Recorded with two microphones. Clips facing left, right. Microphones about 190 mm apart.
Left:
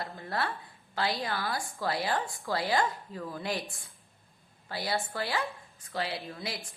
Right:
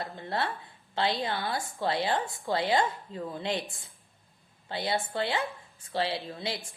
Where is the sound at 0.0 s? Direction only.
25° right (ahead or behind).